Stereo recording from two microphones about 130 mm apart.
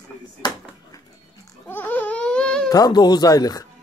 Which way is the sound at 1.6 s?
15° left (ahead or behind).